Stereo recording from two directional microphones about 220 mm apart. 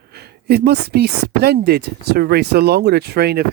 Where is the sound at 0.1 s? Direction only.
45° right (ahead or behind).